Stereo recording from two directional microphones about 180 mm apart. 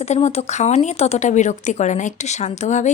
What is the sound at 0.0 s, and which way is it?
Speech, 35° left (ahead or behind).